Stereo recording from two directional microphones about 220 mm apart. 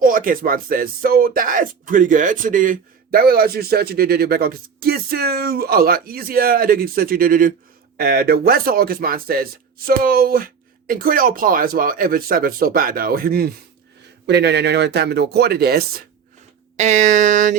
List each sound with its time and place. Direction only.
0.0 s speech: 40° right (ahead or behind)
16.7 s speech: 30° right (ahead or behind)